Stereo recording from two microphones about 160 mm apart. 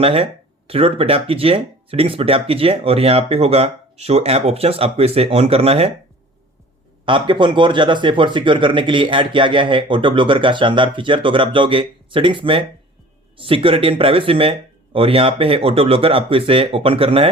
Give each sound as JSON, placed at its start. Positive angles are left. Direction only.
{"t": 0.0, "sound": "speech", "side_deg": -35}
{"t": 7.0, "sound": "speech", "side_deg": -30}